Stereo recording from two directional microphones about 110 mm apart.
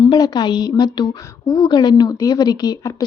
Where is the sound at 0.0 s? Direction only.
40° left (ahead or behind).